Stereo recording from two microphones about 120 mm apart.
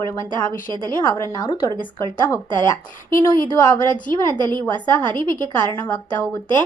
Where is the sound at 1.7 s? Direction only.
40° right (ahead or behind).